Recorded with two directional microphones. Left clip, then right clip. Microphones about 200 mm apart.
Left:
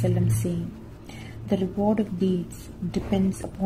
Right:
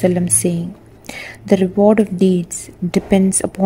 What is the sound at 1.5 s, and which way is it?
A woman's voice, 35° right (ahead or behind).